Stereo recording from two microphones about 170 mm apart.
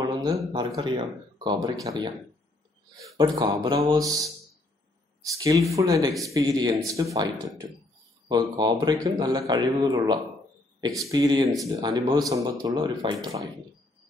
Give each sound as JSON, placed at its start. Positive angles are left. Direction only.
{"t": 0.0, "sound": "speech", "side_deg": -25}
{"t": 3.2, "sound": "speech", "side_deg": -25}